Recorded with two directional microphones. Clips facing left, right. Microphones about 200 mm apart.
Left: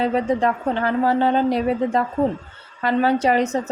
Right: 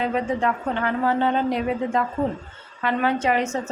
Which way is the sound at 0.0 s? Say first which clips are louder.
Left 4 dB; 35° left (ahead or behind).